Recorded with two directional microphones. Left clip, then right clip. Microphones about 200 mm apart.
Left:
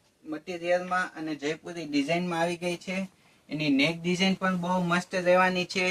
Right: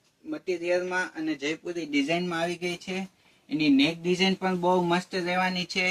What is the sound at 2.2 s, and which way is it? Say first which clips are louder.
Speech: left 1 dB; 25° left (ahead or behind).